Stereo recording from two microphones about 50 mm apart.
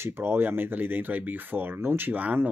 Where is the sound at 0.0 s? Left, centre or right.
Right.